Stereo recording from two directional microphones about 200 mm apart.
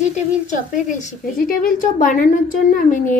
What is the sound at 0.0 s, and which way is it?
A woman's voice, 35° left (ahead or behind).